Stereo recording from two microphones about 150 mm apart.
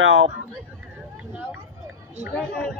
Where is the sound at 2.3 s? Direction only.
5° left (ahead or behind).